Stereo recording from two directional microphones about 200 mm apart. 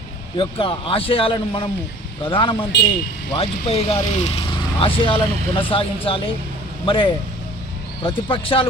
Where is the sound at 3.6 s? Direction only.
30° left (ahead or behind).